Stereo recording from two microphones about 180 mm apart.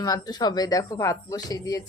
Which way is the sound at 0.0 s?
20° left (ahead or behind).